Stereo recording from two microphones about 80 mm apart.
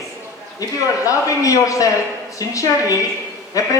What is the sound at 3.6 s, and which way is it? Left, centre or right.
Speech, left.